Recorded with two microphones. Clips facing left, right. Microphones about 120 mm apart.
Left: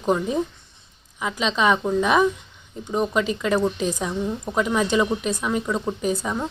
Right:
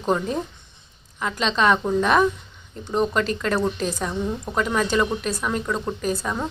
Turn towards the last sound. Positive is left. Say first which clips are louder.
# left 1 dB
turn(degrees=20)  # may be behind; listen again after turning